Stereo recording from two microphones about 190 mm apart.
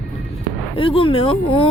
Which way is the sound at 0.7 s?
30° left (ahead or behind).